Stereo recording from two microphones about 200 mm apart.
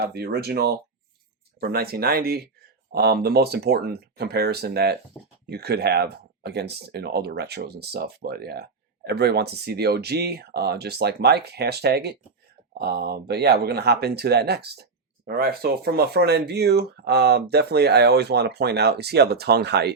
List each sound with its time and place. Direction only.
0.0 s speech: 55° right (ahead or behind)
5.2 s speech: centre (ahead or behind)
5.5 s speech: 55° right (ahead or behind)